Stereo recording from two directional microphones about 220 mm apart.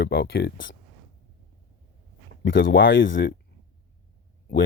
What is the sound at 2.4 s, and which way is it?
Speech, 55° left (ahead or behind).